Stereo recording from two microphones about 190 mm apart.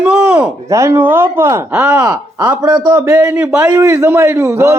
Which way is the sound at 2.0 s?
20° right (ahead or behind).